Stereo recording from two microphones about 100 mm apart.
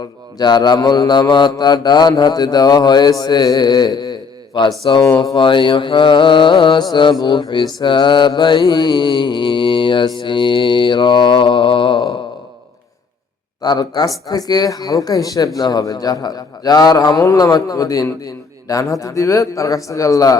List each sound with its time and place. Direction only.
0.3 s mantra: 45° left (ahead or behind)
13.6 s a man's voice: 40° left (ahead or behind)